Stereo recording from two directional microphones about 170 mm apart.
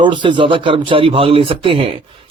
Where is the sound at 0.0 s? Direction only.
30° right (ahead or behind).